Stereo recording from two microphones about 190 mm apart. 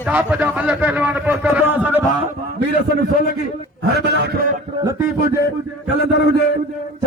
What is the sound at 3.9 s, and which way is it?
Speech, 60° right (ahead or behind).